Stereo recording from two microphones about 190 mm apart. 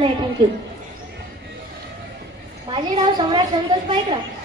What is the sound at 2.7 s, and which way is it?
Speech, 25° right (ahead or behind).